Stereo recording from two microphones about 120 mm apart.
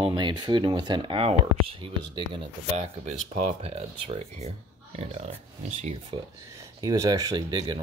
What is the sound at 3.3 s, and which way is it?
Speech, 60° right (ahead or behind).